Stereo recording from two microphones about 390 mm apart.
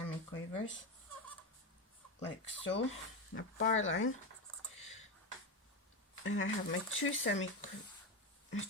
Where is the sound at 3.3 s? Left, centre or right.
Left.